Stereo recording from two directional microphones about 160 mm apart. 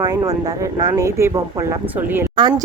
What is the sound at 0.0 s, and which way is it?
Speech, 25° right (ahead or behind).